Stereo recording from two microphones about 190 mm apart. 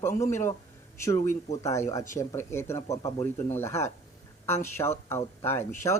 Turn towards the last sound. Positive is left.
turn(degrees=15)  # may be behind; listen again after turning